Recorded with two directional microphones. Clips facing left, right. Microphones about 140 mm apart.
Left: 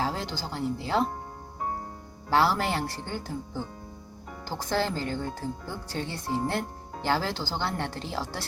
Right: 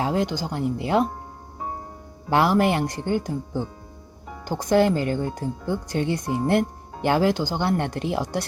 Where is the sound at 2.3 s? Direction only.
15° right (ahead or behind).